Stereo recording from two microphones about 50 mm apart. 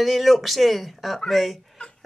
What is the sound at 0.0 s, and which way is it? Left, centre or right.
Speech, centre.